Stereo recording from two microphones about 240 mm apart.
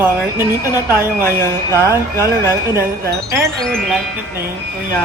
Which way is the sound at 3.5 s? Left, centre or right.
Centre.